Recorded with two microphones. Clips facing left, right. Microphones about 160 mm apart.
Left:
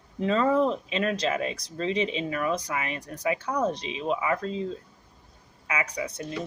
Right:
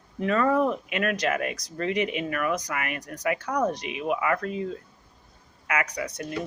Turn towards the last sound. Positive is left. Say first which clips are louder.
# even
turn(degrees=30)  # may be behind; listen again after turning